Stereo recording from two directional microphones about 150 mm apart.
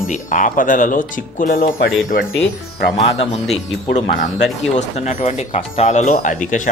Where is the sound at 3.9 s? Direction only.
60° left (ahead or behind).